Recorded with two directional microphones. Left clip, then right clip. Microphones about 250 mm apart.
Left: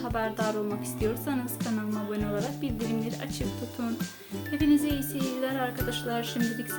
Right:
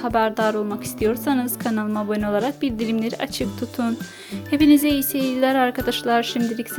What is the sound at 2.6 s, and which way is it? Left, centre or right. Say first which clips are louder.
Speech: right 9 dB; right.